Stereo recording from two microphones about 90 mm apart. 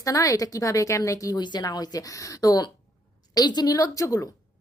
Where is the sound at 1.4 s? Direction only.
50° left (ahead or behind).